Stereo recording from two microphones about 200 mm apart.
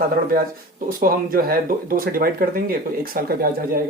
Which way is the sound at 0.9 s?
45° right (ahead or behind).